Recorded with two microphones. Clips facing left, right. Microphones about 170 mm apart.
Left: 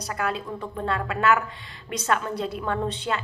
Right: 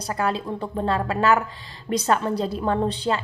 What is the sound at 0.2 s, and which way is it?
A woman's voice, 30° right (ahead or behind).